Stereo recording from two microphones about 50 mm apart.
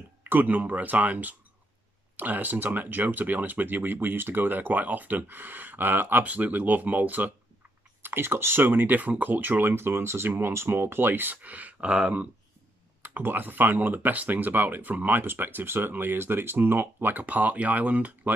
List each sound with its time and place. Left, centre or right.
0.2 s speech: right
6.2 s speech: right
8.0 s speech: right
13.0 s speech: right